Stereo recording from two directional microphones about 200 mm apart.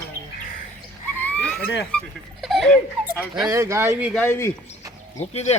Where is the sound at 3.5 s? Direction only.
15° right (ahead or behind).